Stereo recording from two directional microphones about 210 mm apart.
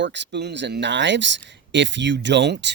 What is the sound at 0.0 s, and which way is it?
Speech, 55° right (ahead or behind).